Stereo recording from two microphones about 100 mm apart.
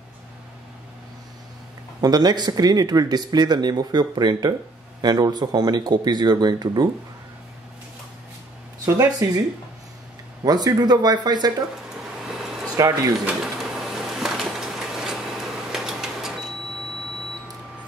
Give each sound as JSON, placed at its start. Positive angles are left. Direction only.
{"t": 2.0, "sound": "speech", "side_deg": -40}
{"t": 8.8, "sound": "speech", "side_deg": -35}
{"t": 10.4, "sound": "speech", "side_deg": -40}
{"t": 12.7, "sound": "speech", "side_deg": -35}
{"t": 13.2, "sound": "a sound", "side_deg": -5}